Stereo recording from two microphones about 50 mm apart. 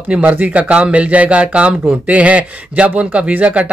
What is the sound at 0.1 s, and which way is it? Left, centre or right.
Speech, right.